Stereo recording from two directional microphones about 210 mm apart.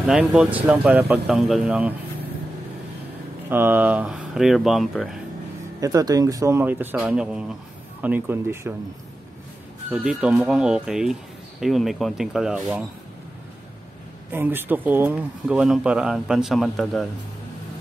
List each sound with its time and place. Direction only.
0.0 s speech: 5° right (ahead or behind)
3.4 s speech: 10° right (ahead or behind)
5.8 s speech: 15° right (ahead or behind)
9.8 s speech: 5° right (ahead or behind)
14.3 s speech: 10° right (ahead or behind)